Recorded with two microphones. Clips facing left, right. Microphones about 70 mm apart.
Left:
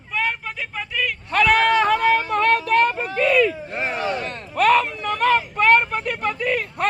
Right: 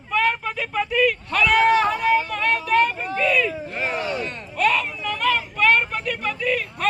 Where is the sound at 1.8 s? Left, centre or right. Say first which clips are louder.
Left 2 dB; left.